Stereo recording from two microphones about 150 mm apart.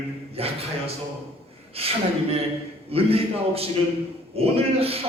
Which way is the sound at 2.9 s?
40° right (ahead or behind).